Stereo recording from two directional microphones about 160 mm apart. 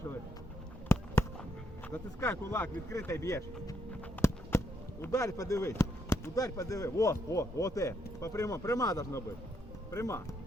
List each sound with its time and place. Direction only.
1.9 s speech: 15° left (ahead or behind)